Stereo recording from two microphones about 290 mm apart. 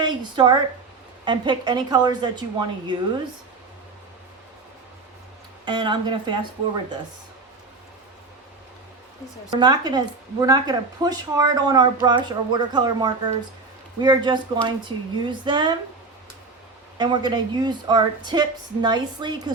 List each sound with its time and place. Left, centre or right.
0.0 s a woman's voice: centre
5.6 s speech: centre
9.6 s speech: centre
17.0 s speech: centre